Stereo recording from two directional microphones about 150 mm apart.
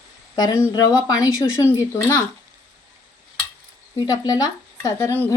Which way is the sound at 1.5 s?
15° left (ahead or behind).